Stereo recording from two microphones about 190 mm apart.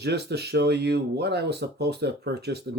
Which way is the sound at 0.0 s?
60° right (ahead or behind).